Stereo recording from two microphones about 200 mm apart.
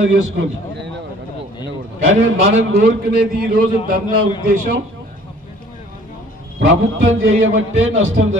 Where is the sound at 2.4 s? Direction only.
50° right (ahead or behind).